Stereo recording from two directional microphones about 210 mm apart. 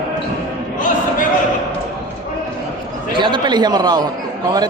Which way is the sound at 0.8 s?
40° left (ahead or behind).